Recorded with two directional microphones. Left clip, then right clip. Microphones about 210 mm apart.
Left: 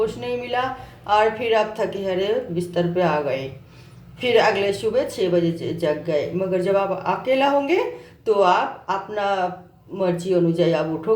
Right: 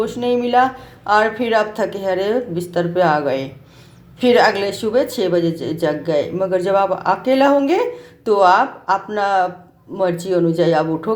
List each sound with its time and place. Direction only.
0.0 s speech: 35° right (ahead or behind)
10.6 s speech: 35° right (ahead or behind)